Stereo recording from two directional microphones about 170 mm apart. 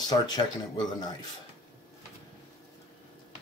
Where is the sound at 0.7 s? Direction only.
25° left (ahead or behind).